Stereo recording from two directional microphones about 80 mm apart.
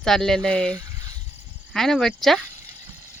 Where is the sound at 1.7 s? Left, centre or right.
Centre.